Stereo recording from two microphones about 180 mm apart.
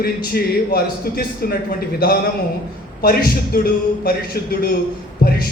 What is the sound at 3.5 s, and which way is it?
Speech, 55° left (ahead or behind).